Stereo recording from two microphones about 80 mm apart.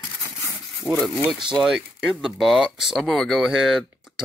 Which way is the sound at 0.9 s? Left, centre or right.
Centre.